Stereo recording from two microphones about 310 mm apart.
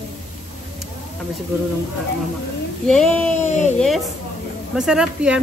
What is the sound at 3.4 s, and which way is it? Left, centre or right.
Speech, left.